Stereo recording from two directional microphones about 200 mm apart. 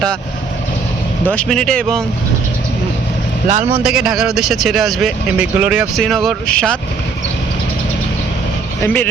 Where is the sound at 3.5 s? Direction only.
40° right (ahead or behind).